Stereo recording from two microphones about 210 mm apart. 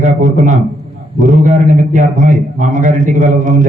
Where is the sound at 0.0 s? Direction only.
35° right (ahead or behind).